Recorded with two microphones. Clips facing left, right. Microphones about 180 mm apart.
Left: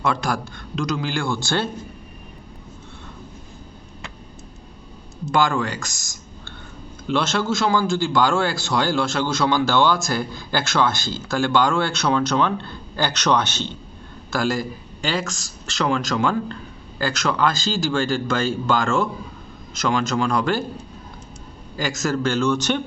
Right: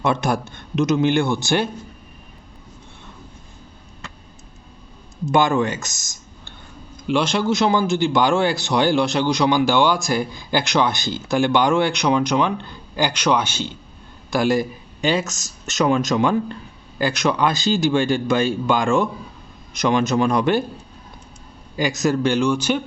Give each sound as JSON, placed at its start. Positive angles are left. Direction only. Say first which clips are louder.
{"t": 0.0, "sound": "speech", "louder": "right 3 dB", "side_deg": -20}
{"t": 5.3, "sound": "a man's voice", "louder": "right 3 dB", "side_deg": -20}
{"t": 21.8, "sound": "a man's voice", "louder": "right 4 dB", "side_deg": -15}